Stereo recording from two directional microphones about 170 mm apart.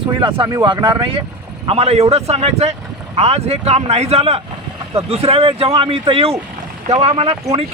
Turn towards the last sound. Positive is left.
turn(degrees=-35)  # may be behind; listen again after turning